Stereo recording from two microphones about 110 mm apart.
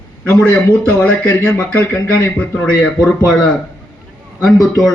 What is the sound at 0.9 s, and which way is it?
Speech, 15° left (ahead or behind).